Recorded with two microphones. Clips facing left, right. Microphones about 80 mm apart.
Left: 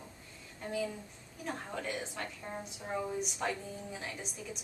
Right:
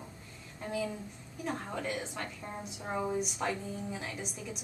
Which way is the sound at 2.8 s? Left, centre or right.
Centre.